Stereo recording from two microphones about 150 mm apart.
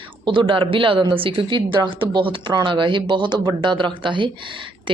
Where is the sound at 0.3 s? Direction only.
35° right (ahead or behind).